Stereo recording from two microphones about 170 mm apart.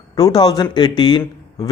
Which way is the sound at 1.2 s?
20° left (ahead or behind).